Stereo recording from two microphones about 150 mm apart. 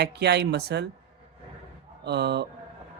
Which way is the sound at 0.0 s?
90° right.